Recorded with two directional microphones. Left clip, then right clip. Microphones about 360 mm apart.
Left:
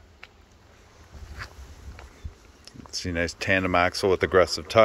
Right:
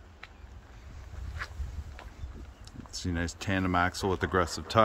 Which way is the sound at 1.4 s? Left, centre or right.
Left.